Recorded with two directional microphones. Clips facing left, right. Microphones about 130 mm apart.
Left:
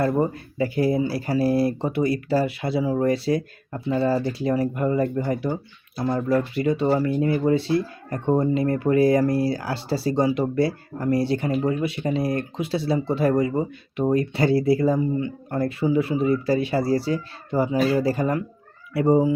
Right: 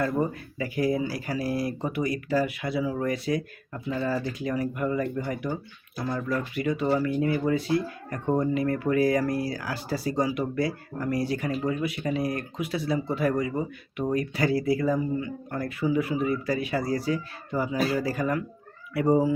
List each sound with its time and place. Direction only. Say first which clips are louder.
0.0 s speech: left 4 dB; 30° left (ahead or behind)